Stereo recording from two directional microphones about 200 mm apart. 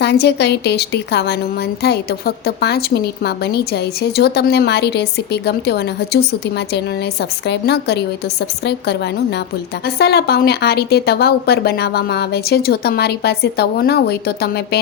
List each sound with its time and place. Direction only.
0.0 s a woman's voice: 55° left (ahead or behind)
9.8 s speech: 50° left (ahead or behind)